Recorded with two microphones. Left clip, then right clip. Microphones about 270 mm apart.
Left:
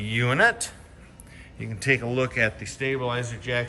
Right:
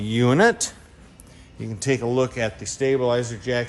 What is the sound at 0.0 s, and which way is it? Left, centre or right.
A man's voice, centre.